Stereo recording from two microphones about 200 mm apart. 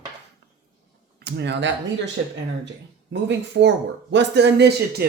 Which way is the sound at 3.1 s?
60° right (ahead or behind).